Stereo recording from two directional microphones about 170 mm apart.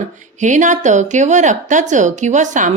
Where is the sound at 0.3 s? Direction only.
45° right (ahead or behind).